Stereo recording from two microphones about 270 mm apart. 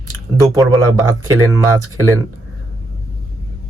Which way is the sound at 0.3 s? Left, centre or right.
Centre.